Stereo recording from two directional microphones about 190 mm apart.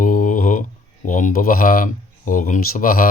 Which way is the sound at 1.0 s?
45° left (ahead or behind).